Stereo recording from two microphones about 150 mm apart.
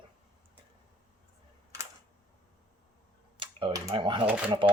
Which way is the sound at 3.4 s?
35° right (ahead or behind).